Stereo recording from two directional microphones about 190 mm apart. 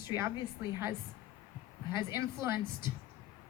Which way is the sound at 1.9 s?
15° right (ahead or behind).